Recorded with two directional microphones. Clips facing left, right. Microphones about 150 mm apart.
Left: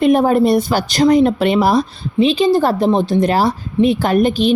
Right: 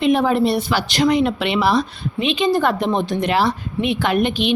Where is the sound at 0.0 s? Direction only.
45° left (ahead or behind).